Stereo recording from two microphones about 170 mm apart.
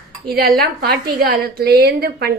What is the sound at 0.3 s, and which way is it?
A woman's voice, 60° right (ahead or behind).